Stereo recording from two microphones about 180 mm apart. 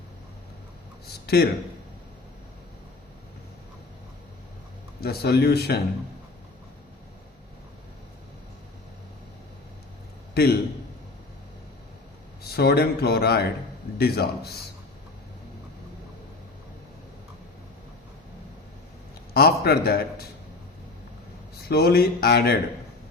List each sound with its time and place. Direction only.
1.0 s speech: 60° left (ahead or behind)
4.9 s speech: 60° left (ahead or behind)
10.4 s speech: 60° left (ahead or behind)
12.4 s speech: 60° left (ahead or behind)
19.3 s speech: 60° left (ahead or behind)
21.7 s speech: 60° left (ahead or behind)